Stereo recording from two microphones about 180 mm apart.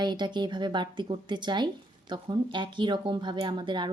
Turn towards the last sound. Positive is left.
turn(degrees=-25)  # may be behind; listen again after turning